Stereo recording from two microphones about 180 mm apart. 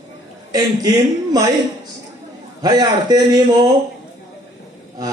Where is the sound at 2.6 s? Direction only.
20° right (ahead or behind).